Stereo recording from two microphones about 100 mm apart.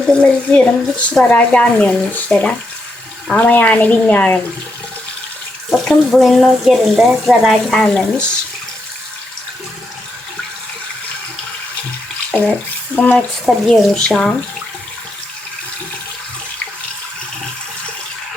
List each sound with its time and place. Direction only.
0.2 s speech: 15° left (ahead or behind)
5.7 s speech: 5° left (ahead or behind)
12.3 s speech: centre (ahead or behind)
13.0 s speech: 15° left (ahead or behind)
13.7 s speech: 5° left (ahead or behind)